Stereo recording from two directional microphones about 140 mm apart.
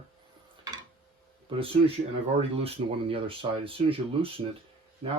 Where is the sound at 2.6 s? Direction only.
45° right (ahead or behind).